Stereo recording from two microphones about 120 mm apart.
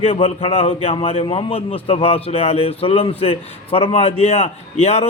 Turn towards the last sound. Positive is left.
turn(degrees=60)  # may be behind; listen again after turning